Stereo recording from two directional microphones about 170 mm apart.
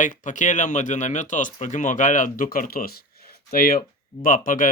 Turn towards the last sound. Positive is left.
turn(degrees=55)  # may be behind; listen again after turning